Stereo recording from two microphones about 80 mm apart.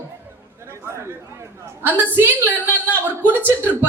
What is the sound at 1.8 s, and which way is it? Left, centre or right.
A woman's voice, right.